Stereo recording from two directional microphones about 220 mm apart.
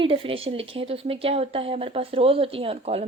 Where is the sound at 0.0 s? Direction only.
25° right (ahead or behind).